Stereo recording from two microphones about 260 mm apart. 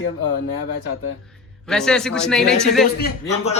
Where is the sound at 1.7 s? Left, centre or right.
Centre.